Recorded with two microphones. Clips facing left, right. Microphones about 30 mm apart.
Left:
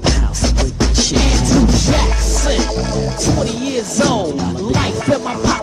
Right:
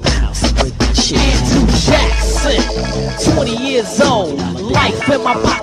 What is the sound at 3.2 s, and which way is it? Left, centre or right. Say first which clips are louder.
Music: right 6 dB; right.